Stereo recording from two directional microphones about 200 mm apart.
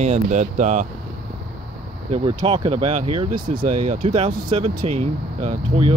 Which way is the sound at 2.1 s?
30° right (ahead or behind).